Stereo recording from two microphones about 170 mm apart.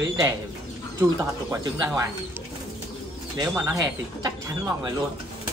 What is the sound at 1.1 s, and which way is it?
Speech, 20° right (ahead or behind).